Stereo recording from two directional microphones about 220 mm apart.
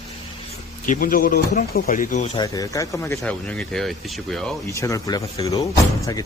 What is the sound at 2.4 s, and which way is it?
Speech, 15° left (ahead or behind).